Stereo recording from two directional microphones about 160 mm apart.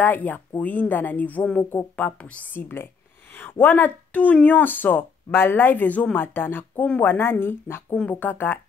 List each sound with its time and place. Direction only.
0.0 s speech: 10° left (ahead or behind)